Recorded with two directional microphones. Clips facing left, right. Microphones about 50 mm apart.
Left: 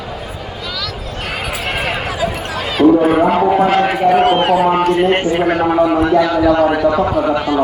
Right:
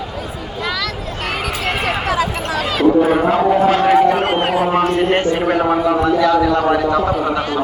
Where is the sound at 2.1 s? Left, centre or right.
Right.